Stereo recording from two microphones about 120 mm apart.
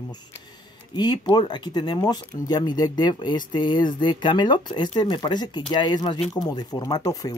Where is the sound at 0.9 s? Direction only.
40° left (ahead or behind).